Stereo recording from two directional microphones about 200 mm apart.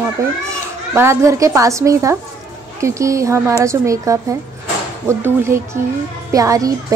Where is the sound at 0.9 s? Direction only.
15° right (ahead or behind).